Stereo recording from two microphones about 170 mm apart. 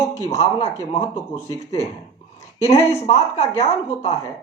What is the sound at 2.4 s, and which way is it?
Speech, 40° left (ahead or behind).